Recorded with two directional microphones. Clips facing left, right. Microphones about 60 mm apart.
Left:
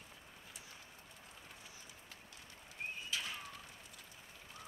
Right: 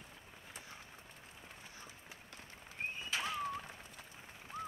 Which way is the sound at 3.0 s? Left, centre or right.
Right.